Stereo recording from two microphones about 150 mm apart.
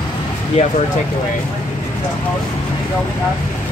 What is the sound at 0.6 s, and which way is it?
Speech, 50° left (ahead or behind).